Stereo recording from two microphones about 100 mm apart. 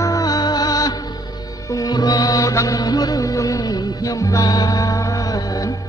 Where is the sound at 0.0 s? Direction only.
35° left (ahead or behind).